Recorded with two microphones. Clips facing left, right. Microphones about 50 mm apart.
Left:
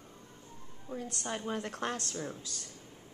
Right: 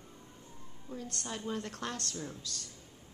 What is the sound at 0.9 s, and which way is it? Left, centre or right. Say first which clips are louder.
A woman's voice: left 3 dB; left.